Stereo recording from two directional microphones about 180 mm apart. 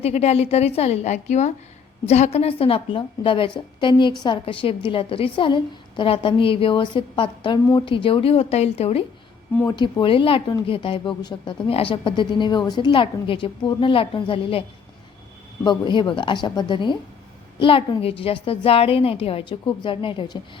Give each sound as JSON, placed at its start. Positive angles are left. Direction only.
{"t": 0.0, "sound": "a woman's voice", "side_deg": 35}
{"t": 15.6, "sound": "a woman's voice", "side_deg": 25}